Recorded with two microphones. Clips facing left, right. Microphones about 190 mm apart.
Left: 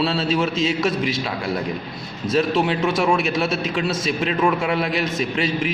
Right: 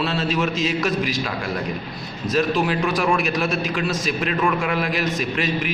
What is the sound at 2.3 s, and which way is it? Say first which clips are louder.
A man's voice: left 1 dB; 25° left (ahead or behind).